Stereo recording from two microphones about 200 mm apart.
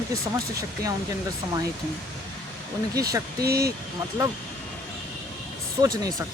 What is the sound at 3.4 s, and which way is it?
Speech, 50° right (ahead or behind).